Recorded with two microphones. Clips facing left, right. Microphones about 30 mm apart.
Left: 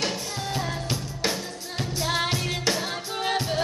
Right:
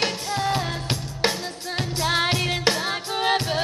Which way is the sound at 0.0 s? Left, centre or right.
Right.